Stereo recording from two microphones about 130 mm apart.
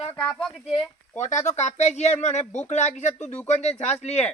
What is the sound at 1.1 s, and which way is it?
Speech, 65° left (ahead or behind).